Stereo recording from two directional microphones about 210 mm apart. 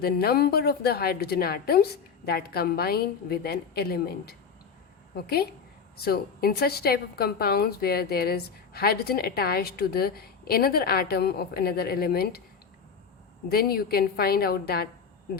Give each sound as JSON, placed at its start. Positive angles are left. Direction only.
{"t": 0.0, "sound": "a woman's voice", "side_deg": 45}
{"t": 13.5, "sound": "a woman's voice", "side_deg": 45}